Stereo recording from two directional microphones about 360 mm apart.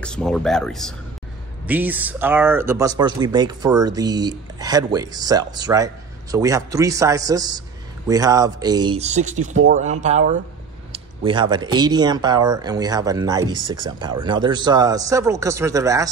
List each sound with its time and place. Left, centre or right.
0.0 s speech: centre